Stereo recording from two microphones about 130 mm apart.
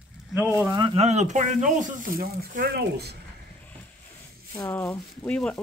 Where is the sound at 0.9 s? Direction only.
60° right (ahead or behind); by 2.6 s 85° right.